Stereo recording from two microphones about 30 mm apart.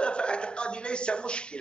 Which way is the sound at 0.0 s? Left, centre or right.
Left.